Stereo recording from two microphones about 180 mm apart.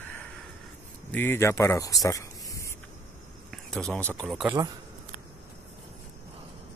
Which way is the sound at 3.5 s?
5° left (ahead or behind).